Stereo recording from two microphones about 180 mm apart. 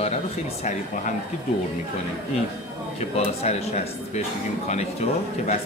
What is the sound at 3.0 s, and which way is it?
Speech, 35° left (ahead or behind).